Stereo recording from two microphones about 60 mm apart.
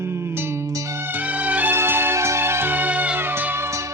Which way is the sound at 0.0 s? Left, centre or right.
Right.